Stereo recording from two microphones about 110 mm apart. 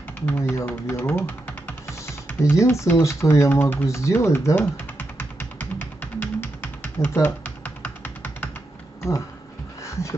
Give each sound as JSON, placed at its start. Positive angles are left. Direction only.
{"t": 0.3, "sound": "speech", "side_deg": 20}
{"t": 2.2, "sound": "typing", "side_deg": 20}